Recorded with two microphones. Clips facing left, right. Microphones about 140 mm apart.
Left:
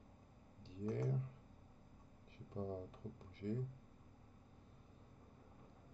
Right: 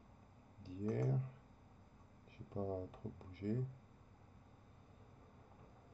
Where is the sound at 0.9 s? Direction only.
45° right (ahead or behind).